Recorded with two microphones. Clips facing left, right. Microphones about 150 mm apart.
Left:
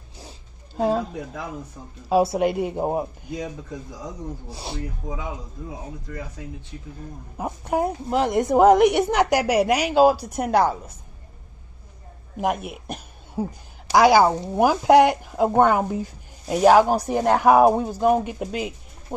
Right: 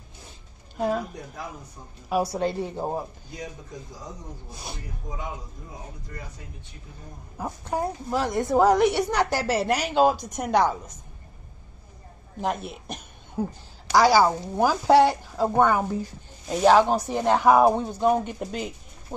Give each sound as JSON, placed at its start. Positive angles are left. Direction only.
{"t": 0.7, "sound": "speech", "side_deg": 30}
{"t": 2.0, "sound": "speech", "side_deg": 25}
{"t": 4.5, "sound": "speech", "side_deg": 30}
{"t": 6.1, "sound": "speech", "side_deg": 90}
{"t": 7.3, "sound": "a woman's voice", "side_deg": 20}
{"t": 12.6, "sound": "cough", "side_deg": 10}
{"t": 13.9, "sound": "a woman's voice", "side_deg": 20}